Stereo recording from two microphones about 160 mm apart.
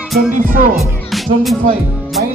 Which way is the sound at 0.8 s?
Centre (ahead or behind).